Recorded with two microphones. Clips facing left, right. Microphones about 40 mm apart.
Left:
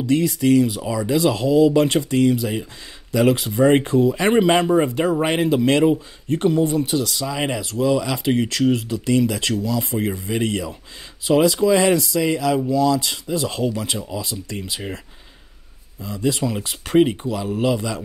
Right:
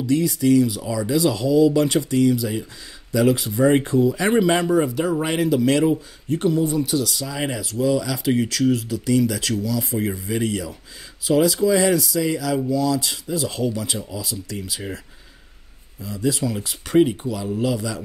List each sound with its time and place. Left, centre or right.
0.0 s speech: left
7.6 s speech: left
8.0 s speech: left
16.0 s speech: left